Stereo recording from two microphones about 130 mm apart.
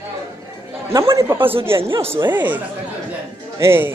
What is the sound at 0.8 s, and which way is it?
A man's voice, 20° right (ahead or behind).